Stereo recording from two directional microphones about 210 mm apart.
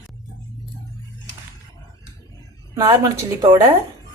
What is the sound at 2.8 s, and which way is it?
Speech, 15° right (ahead or behind).